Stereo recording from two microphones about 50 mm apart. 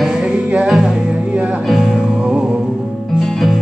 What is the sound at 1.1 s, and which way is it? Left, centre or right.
Music, right.